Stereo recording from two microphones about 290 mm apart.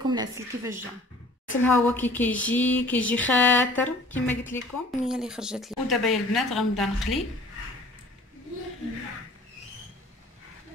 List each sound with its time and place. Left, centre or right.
0.0 s a woman's voice: centre
1.6 s speech: centre